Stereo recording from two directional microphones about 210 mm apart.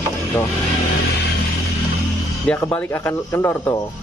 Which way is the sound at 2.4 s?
10° left (ahead or behind).